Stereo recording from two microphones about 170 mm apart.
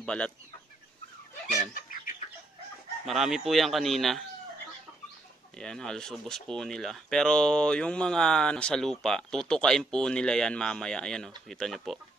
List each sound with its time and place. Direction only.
0.0 s speech: 5° left (ahead or behind)
1.7 s chicken: 55° left (ahead or behind)
3.1 s speech: centre (ahead or behind)
5.6 s speech: 5° left (ahead or behind)